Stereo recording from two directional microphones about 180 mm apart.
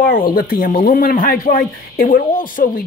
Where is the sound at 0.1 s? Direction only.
55° left (ahead or behind).